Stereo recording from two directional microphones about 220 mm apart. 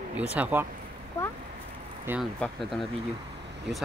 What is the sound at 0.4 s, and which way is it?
Speech, 5° right (ahead or behind).